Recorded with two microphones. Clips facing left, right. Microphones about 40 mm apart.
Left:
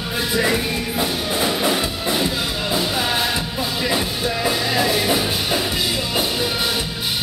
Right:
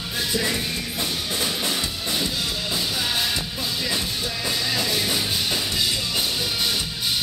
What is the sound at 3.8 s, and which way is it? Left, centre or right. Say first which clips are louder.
Music: left 6 dB; left.